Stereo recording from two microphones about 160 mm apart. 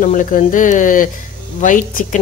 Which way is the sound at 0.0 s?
55° left (ahead or behind).